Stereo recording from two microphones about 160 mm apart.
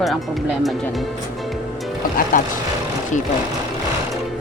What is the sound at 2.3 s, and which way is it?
Speech, 60° left (ahead or behind).